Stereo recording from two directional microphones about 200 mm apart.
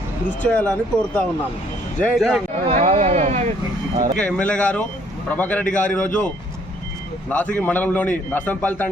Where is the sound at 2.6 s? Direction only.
30° right (ahead or behind).